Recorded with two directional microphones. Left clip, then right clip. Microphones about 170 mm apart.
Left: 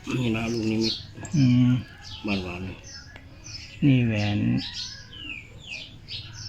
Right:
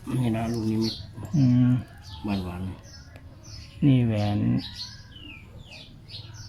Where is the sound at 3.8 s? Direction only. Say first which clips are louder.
Left 1 dB; centre (ahead or behind).